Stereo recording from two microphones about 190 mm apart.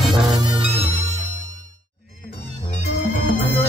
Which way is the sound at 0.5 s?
30° right (ahead or behind).